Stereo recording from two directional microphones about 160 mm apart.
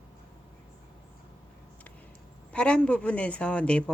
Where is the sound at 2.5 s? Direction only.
5° left (ahead or behind).